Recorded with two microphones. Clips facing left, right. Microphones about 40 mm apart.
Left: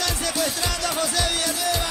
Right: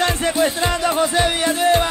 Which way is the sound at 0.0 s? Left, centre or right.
Right.